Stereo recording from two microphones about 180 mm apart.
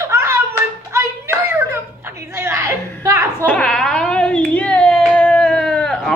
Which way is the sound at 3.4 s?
5° left (ahead or behind).